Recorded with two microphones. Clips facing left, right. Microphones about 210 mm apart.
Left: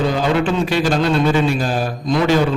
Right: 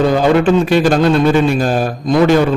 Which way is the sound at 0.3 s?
50° right (ahead or behind).